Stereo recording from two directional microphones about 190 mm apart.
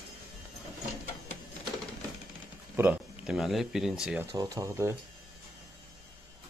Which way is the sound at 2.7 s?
10° right (ahead or behind).